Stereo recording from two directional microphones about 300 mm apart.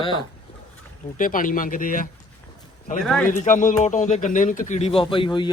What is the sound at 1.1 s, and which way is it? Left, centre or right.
Speech, left.